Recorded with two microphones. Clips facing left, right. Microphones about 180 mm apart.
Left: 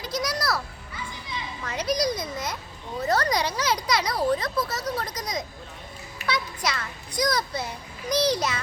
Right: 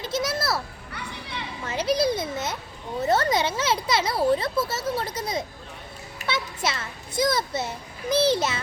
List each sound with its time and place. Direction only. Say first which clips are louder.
0.0 s children playing: right 2 dB; 25° right (ahead or behind)
0.9 s children playing: even; 65° right (ahead or behind)
1.6 s a child's voice: right 3 dB; 30° right (ahead or behind)